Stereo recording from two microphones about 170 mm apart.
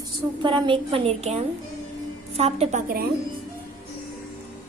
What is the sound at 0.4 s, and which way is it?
A woman's voice, 30° right (ahead or behind).